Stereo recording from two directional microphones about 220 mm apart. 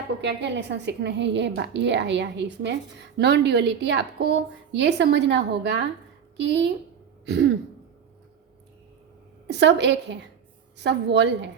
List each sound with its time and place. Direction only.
0.2 s a woman's voice: 50° right (ahead or behind)
9.5 s a woman's voice: 50° right (ahead or behind)